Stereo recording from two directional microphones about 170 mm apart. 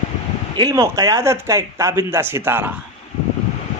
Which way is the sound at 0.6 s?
20° right (ahead or behind).